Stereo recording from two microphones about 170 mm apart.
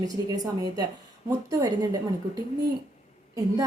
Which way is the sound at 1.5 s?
20° right (ahead or behind).